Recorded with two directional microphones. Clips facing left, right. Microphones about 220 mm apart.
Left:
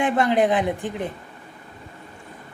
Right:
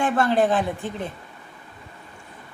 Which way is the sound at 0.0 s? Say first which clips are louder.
Left 1 dB; 20° left (ahead or behind).